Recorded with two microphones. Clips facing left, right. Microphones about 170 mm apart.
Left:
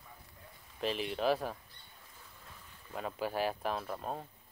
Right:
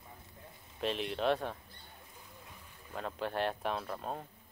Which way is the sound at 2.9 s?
5° left (ahead or behind).